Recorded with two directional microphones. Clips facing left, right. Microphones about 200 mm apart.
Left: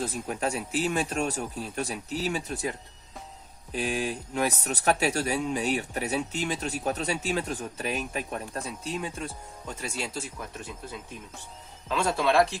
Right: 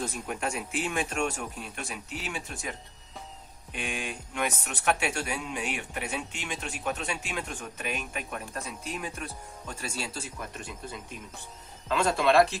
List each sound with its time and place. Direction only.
0.0 s speech: 35° left (ahead or behind)
3.7 s speech: 35° left (ahead or behind); by 10.2 s 20° left (ahead or behind)
11.9 s speech: 10° left (ahead or behind)